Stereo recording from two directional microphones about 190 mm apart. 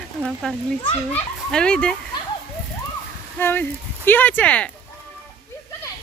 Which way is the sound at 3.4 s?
10° left (ahead or behind).